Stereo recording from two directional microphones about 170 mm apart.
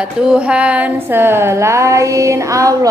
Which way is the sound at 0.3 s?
5° right (ahead or behind).